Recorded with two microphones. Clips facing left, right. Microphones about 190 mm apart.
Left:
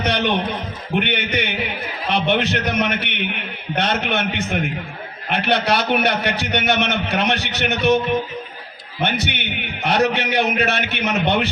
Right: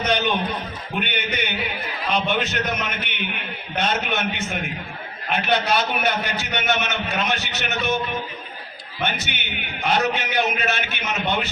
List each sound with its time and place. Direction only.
0.0 s a sound: 65° left (ahead or behind)
0.9 s a man's voice: 65° left (ahead or behind)
9.0 s a man's voice: 65° left (ahead or behind)